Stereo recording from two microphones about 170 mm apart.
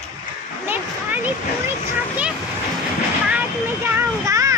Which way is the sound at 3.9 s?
20° right (ahead or behind).